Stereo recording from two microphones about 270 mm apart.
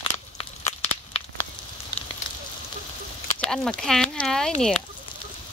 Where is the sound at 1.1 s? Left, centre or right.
Left.